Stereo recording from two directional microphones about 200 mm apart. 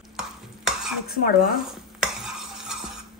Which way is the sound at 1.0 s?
50° left (ahead or behind).